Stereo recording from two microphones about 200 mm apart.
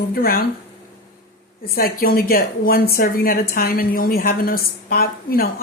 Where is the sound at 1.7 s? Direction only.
45° left (ahead or behind).